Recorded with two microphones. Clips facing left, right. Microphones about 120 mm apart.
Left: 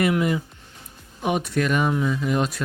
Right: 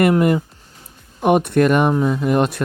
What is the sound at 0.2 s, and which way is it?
Speech, 50° right (ahead or behind).